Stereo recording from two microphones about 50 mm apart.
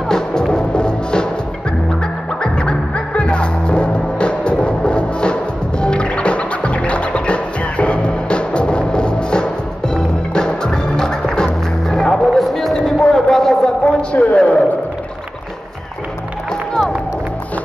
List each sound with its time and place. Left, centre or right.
0.1 s music: centre
3.2 s music: left
14.1 s a sound: left